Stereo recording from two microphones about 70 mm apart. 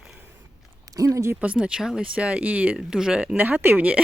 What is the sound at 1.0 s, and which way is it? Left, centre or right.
Speech, right.